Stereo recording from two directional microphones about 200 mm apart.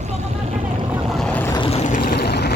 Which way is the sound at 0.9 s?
Centre (ahead or behind).